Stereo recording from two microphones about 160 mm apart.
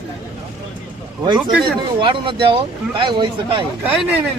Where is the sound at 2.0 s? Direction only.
30° right (ahead or behind).